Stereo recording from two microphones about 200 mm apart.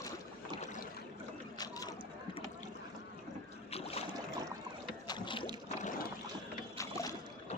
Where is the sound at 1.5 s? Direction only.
20° left (ahead or behind).